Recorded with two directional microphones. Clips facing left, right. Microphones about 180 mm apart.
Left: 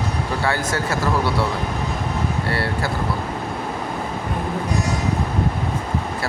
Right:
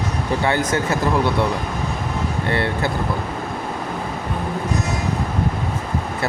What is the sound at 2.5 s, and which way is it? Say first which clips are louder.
Speech: right 6 dB; 20° right (ahead or behind).